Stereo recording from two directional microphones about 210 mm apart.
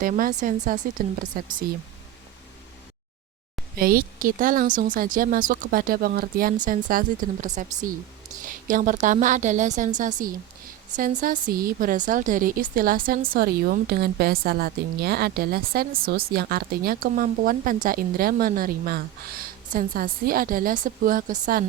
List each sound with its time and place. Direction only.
0.0 s speech: 40° right (ahead or behind)
3.8 s a woman's voice: 45° right (ahead or behind)